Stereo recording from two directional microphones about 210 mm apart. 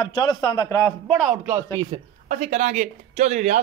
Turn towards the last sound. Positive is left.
turn(degrees=-35)  # may be behind; listen again after turning